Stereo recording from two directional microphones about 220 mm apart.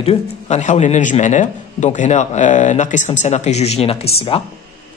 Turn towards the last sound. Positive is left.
turn(degrees=25)  # may be behind; listen again after turning